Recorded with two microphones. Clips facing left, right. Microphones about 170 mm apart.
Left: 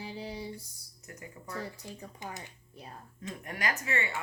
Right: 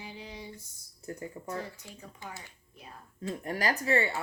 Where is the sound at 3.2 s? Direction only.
35° right (ahead or behind).